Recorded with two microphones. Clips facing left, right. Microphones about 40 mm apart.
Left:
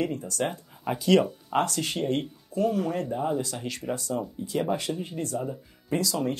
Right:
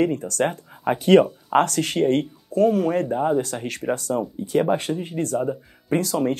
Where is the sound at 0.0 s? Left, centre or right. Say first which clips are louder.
Right 7 dB; right.